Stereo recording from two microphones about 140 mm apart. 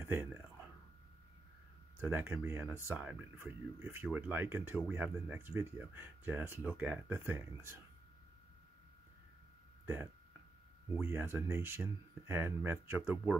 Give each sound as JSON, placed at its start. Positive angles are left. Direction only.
{"t": 0.0, "sound": "speech", "side_deg": -15}
{"t": 2.0, "sound": "speech", "side_deg": -15}
{"t": 2.6, "sound": "speech", "side_deg": -10}
{"t": 11.0, "sound": "speech", "side_deg": -15}